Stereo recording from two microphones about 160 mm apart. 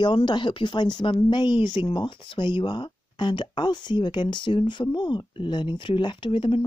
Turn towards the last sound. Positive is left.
turn(degrees=35)  # may be behind; listen again after turning